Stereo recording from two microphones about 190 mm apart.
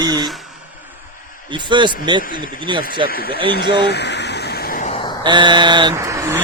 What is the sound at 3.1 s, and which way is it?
Speech, 50° left (ahead or behind).